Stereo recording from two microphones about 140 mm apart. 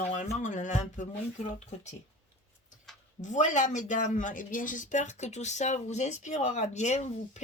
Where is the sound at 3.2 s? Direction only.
60° left (ahead or behind).